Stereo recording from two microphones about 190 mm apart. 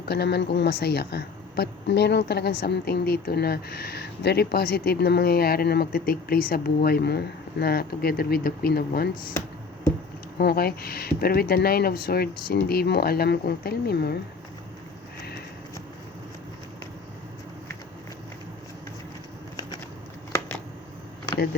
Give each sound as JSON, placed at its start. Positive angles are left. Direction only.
{"t": 0.1, "sound": "a woman's voice", "side_deg": 60}
{"t": 10.3, "sound": "a woman's voice", "side_deg": 55}